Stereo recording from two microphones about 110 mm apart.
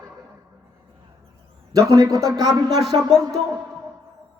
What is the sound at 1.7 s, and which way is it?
Speech, 30° right (ahead or behind).